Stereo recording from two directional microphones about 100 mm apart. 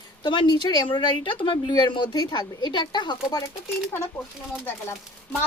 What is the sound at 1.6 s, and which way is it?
Speech, 45° left (ahead or behind).